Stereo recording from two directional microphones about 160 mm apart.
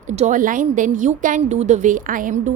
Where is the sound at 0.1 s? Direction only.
50° right (ahead or behind).